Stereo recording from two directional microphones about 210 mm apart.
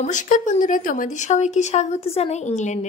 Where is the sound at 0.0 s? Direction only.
35° left (ahead or behind).